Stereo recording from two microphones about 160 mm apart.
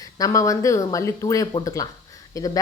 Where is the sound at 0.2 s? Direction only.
20° left (ahead or behind).